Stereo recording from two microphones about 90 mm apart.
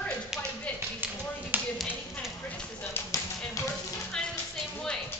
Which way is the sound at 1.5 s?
20° right (ahead or behind).